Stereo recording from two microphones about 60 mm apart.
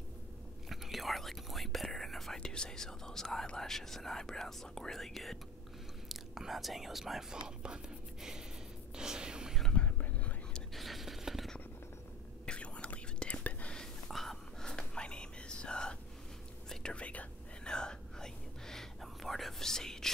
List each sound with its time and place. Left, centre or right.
0.7 s speech: centre
8.9 s a sound: centre
9.8 s whispering: left
10.7 s a sound: centre
12.4 s whispering: centre
13.7 s whispering: centre; by 17.7 s left
17.7 s whispering: centre